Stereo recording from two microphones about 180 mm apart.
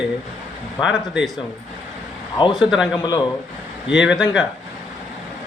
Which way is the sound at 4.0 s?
5° right (ahead or behind).